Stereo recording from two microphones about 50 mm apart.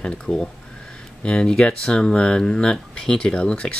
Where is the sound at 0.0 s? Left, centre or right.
Centre.